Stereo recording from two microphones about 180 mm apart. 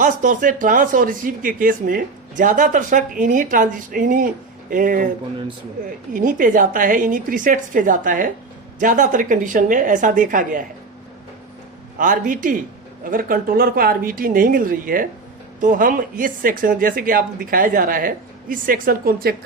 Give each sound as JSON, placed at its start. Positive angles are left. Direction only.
{"t": 0.0, "sound": "speech", "side_deg": -45}
{"t": 6.1, "sound": "speech", "side_deg": -50}
{"t": 11.9, "sound": "speech", "side_deg": -50}